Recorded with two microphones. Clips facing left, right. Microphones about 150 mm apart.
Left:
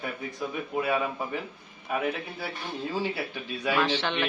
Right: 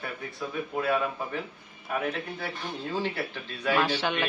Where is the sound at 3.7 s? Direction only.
10° right (ahead or behind).